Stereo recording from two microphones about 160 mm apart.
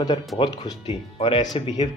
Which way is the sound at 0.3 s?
30° left (ahead or behind).